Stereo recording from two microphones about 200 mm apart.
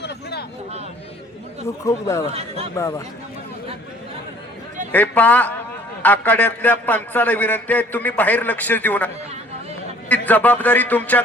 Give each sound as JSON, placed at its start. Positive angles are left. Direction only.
{"t": 0.0, "sound": "a sound", "side_deg": 55}
{"t": 1.6, "sound": "a man's voice", "side_deg": 15}
{"t": 4.9, "sound": "a man's voice", "side_deg": 10}
{"t": 10.1, "sound": "a man's voice", "side_deg": 10}